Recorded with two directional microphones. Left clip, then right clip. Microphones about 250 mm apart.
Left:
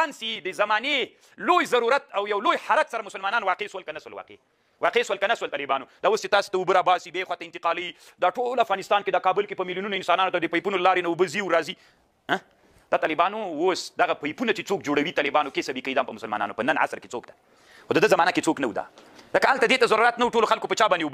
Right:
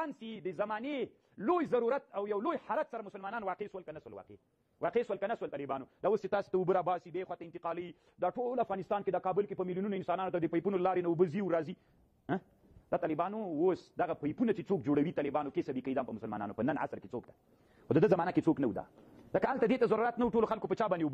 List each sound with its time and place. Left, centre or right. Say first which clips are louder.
0.0 s a man's voice: left 13 dB; centre
12.9 s a man's voice: left 11 dB; centre